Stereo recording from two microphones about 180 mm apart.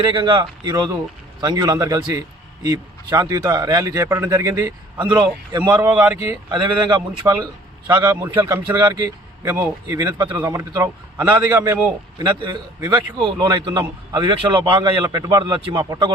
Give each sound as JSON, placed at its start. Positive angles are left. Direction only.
{"t": 0.0, "sound": "a man's voice", "side_deg": -25}
{"t": 5.7, "sound": "a man's voice", "side_deg": -10}
{"t": 6.5, "sound": "a man's voice", "side_deg": -25}
{"t": 8.0, "sound": "a man's voice", "side_deg": -10}